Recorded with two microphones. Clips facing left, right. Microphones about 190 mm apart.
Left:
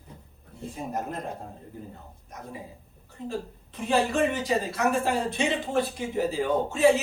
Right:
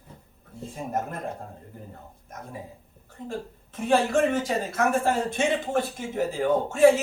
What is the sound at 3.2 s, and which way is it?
Speech, 50° right (ahead or behind).